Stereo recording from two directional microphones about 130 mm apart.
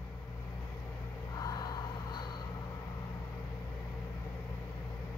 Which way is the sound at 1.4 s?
30° left (ahead or behind).